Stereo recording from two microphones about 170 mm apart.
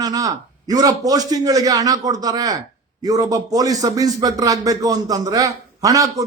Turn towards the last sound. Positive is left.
turn(degrees=-20)  # may be behind; listen again after turning